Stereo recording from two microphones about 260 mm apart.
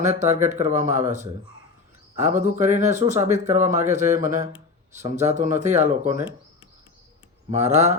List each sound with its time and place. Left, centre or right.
0.0 s speech: right